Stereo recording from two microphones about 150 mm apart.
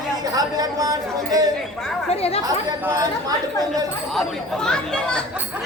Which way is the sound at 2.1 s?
45° left (ahead or behind).